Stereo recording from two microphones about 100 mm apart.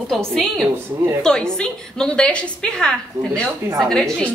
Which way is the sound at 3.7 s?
5° left (ahead or behind).